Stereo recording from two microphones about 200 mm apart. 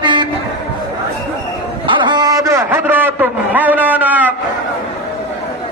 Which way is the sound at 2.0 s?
20° right (ahead or behind).